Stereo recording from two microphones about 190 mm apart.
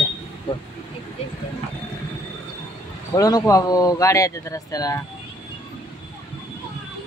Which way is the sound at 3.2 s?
20° left (ahead or behind).